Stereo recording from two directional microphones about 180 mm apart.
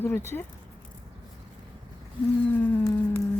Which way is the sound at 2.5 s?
10° left (ahead or behind).